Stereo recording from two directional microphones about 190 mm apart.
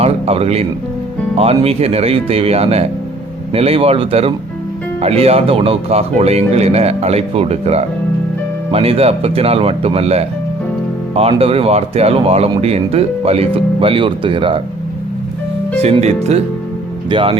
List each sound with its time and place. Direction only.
0.0 s music: 30° right (ahead or behind)
1.4 s speech: 30° right (ahead or behind)
15.8 s speech: 35° right (ahead or behind)